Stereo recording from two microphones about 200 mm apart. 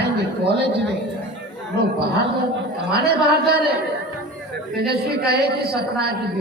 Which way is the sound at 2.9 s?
55° right (ahead or behind).